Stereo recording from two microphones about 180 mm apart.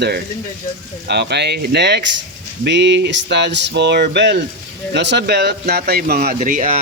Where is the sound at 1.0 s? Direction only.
70° right (ahead or behind).